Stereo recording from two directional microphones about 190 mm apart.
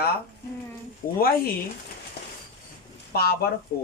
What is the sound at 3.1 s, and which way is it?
Speech, 55° left (ahead or behind).